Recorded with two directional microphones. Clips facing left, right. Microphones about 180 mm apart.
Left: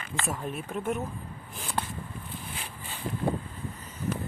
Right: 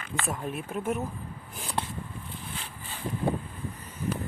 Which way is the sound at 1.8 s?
25° right (ahead or behind).